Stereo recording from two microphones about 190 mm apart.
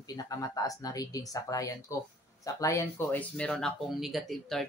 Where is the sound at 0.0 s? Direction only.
20° left (ahead or behind).